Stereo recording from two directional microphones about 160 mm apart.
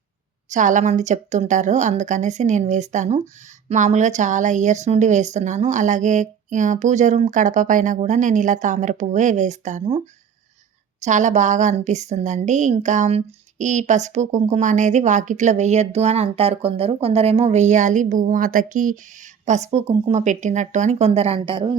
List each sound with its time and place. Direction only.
0.5 s a woman's voice: 50° right (ahead or behind)
11.0 s a woman's voice: 50° right (ahead or behind); by 21.8 s 30° right (ahead or behind)